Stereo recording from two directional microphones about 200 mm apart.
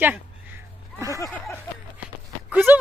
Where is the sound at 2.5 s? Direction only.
10° right (ahead or behind).